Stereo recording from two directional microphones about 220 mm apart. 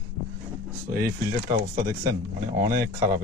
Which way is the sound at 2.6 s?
15° right (ahead or behind).